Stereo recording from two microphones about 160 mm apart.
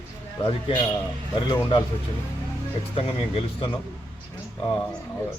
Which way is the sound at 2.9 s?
35° left (ahead or behind).